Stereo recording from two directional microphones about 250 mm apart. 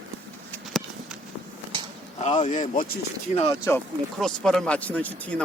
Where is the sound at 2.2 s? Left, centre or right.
Left.